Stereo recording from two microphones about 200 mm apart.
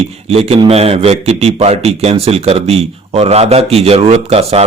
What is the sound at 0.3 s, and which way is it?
A man's voice, 30° right (ahead or behind).